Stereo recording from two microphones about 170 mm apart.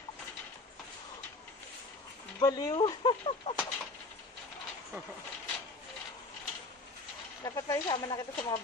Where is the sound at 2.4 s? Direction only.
20° left (ahead or behind).